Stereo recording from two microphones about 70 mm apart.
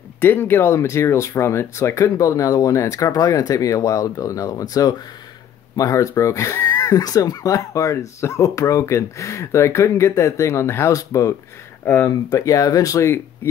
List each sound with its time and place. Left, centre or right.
0.2 s speech: left
6.8 s speech: left
11.8 s speech: left
12.3 s speech: left